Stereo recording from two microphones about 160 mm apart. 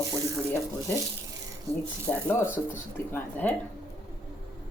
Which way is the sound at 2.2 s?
15° left (ahead or behind).